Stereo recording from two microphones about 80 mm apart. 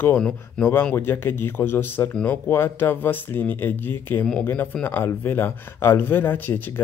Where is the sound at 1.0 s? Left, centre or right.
Left.